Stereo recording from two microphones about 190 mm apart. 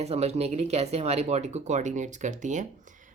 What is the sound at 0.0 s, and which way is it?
Speech, 35° right (ahead or behind).